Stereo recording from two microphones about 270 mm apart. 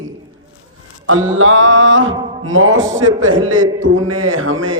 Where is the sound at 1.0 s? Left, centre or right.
Right.